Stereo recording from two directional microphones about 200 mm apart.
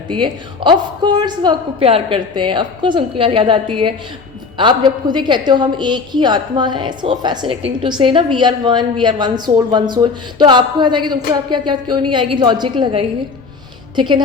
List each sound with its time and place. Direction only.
0.1 s a woman's voice: 25° right (ahead or behind)